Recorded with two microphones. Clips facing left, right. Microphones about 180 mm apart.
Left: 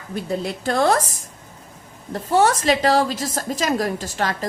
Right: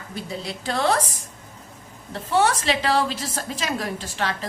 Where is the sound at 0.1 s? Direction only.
50° left (ahead or behind).